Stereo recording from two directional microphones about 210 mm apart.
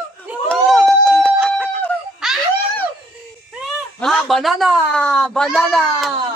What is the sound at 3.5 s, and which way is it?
A man's voice, centre (ahead or behind).